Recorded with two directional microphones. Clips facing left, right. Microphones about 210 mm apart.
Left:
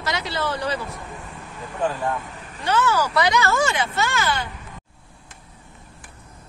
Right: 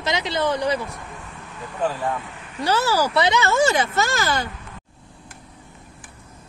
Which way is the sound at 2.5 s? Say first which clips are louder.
Right 1 dB; 35° right (ahead or behind).